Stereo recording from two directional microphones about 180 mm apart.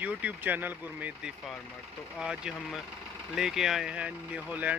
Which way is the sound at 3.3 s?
Centre (ahead or behind).